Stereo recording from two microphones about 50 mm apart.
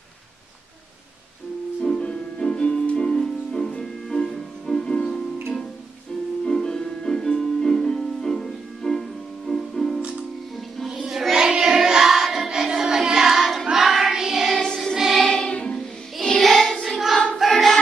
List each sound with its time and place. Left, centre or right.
1.8 s music: centre
6.4 s music: centre
10.9 s child singing: centre
11.3 s child singing: centre
14.5 s music: centre
15.0 s music: centre
15.2 s music: centre
17.4 s choir: centre